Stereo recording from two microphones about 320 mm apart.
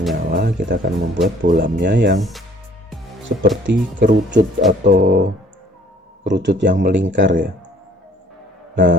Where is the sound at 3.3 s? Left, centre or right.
Right.